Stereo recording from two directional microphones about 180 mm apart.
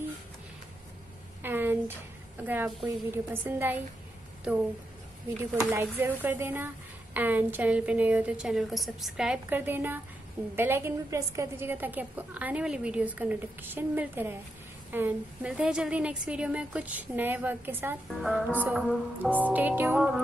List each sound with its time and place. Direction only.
1.4 s a sound: 10° right (ahead or behind)
2.4 s a woman's voice: 10° right (ahead or behind)
5.6 s a woman's voice: 10° right (ahead or behind)